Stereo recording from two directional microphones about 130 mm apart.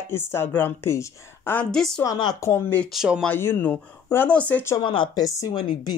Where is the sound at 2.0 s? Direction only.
30° left (ahead or behind); by 2.8 s 15° left (ahead or behind).